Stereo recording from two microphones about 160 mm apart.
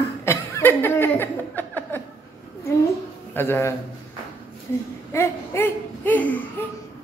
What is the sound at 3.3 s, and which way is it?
Speech, 15° left (ahead or behind).